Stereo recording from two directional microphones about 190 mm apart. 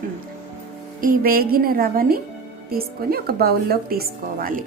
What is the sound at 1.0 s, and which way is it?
A woman's voice, 50° right (ahead or behind).